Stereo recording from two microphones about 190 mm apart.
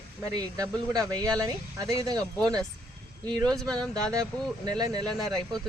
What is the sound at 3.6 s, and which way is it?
Speech, 20° right (ahead or behind).